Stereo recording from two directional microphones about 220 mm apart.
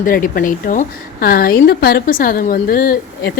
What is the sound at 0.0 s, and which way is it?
A woman's voice, 40° left (ahead or behind).